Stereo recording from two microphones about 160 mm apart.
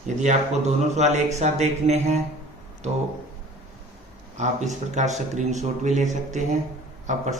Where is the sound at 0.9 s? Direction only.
45° right (ahead or behind).